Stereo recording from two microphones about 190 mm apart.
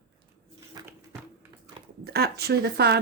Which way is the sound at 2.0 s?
55° right (ahead or behind).